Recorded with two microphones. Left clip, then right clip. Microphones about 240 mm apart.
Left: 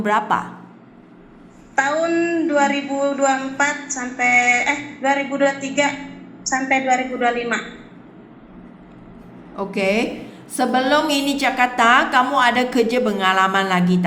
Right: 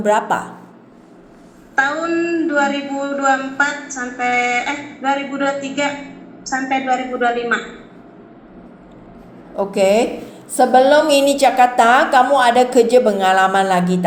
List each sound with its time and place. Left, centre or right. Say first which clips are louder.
0.0 s a woman's voice: right 3 dB; centre
1.7 s a man's voice: right 1 dB; centre
9.6 s a woman's voice: right 6 dB; centre